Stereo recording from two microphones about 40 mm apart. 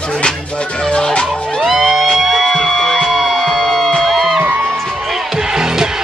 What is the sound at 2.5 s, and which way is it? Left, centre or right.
Music, centre.